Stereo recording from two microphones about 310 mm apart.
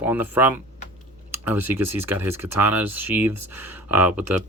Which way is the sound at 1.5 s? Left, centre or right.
Centre.